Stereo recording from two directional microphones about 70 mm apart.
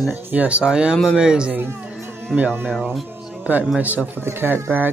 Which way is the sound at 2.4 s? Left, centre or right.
Right.